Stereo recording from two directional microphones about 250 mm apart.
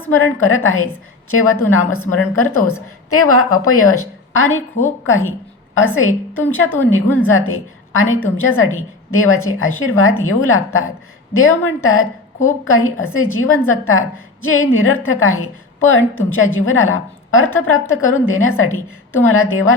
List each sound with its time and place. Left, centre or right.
0.0 s a woman's voice: left